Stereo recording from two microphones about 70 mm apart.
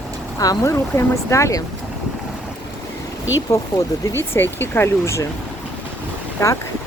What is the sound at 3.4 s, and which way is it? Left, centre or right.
Speech, left.